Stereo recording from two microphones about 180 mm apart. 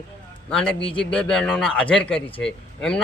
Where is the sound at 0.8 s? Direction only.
30° left (ahead or behind).